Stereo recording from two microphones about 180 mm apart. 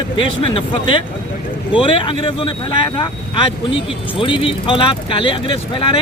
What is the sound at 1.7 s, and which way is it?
Speech, 30° left (ahead or behind).